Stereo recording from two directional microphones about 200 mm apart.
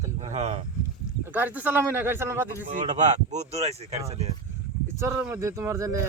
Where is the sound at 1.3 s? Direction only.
10° right (ahead or behind).